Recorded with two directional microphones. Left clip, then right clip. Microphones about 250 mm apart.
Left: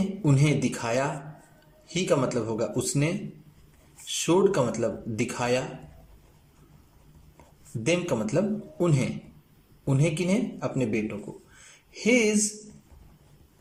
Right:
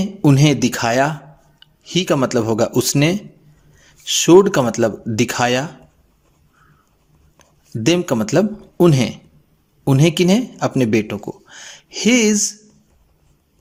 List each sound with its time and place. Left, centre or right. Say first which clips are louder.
0.2 s speech: right 12 dB; right
7.9 s speech: right 9 dB; right